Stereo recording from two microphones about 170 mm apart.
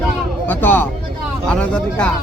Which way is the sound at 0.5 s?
10° left (ahead or behind).